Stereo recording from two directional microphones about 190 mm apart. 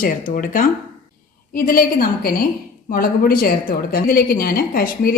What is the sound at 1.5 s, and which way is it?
A woman's voice, 50° left (ahead or behind).